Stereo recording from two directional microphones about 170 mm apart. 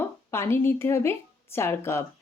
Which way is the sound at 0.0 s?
15° left (ahead or behind).